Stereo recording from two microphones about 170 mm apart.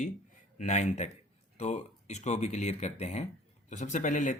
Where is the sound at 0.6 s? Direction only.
45° left (ahead or behind).